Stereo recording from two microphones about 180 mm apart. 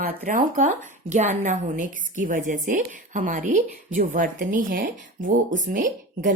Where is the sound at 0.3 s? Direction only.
45° right (ahead or behind).